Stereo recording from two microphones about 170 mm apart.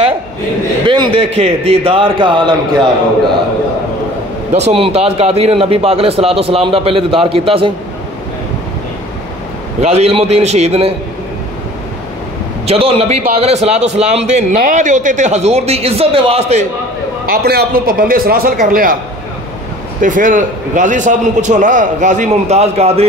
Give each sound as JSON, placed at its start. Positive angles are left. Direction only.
{"t": 0.8, "sound": "a man's voice", "side_deg": -30}
{"t": 4.6, "sound": "a man's voice", "side_deg": -35}
{"t": 9.8, "sound": "a man's voice", "side_deg": -35}
{"t": 12.6, "sound": "a man's voice", "side_deg": -35}
{"t": 17.3, "sound": "a man's voice", "side_deg": -65}
{"t": 20.0, "sound": "a man's voice", "side_deg": -50}